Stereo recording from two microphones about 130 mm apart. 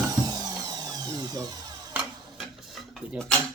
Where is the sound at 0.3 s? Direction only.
30° right (ahead or behind).